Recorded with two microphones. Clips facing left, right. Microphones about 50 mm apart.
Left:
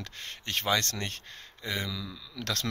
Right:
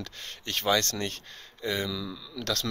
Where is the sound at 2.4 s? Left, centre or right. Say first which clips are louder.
Right 2 dB; left.